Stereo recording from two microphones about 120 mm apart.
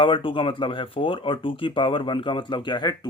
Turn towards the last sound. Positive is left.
turn(degrees=35)  # may be behind; listen again after turning